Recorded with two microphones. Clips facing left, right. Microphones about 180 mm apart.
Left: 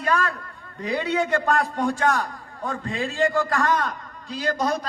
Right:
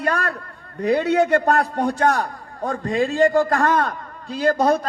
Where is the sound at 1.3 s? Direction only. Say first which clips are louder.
Right 4 dB; 40° right (ahead or behind).